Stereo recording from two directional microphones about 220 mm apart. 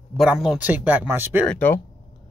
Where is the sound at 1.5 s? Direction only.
10° left (ahead or behind).